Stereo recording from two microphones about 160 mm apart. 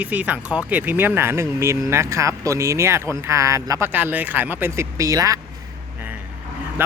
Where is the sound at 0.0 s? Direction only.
10° right (ahead or behind).